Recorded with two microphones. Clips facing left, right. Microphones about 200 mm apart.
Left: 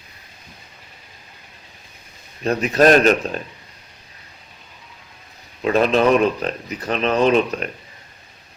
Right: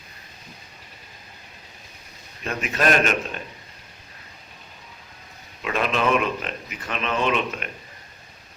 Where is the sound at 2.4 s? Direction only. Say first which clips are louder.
Left 9 dB; 35° left (ahead or behind).